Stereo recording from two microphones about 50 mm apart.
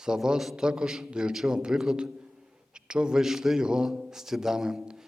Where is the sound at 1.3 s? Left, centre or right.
Centre.